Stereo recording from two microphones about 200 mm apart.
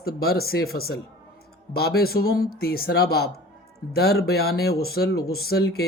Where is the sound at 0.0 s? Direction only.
50° left (ahead or behind).